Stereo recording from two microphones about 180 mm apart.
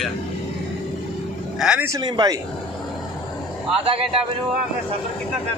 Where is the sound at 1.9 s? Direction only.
25° right (ahead or behind).